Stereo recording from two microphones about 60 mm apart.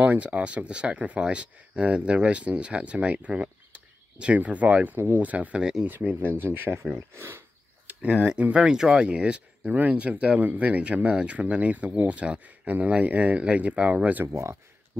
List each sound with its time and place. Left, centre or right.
0.0 s speech: right
5.6 s speech: centre
6.0 s speech: right
7.8 s speech: right
14.2 s speech: right